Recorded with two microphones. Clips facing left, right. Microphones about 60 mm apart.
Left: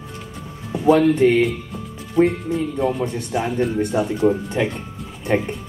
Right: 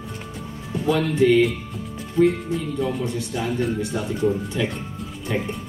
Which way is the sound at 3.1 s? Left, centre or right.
Left.